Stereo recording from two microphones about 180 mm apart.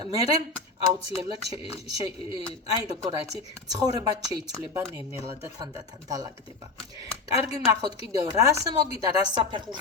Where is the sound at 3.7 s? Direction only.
20° right (ahead or behind).